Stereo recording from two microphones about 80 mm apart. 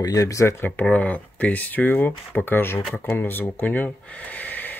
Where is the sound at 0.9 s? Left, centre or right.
Centre.